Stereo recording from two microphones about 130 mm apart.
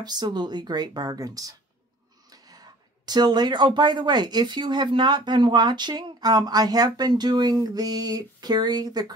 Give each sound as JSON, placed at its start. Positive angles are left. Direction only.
{"t": 0.0, "sound": "speech", "side_deg": -35}